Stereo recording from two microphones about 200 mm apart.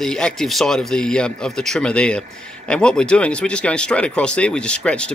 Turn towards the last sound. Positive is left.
turn(degrees=5)  # may be behind; listen again after turning